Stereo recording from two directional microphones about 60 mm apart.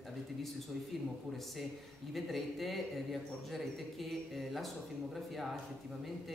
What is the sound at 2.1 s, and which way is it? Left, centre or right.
A man's voice, centre.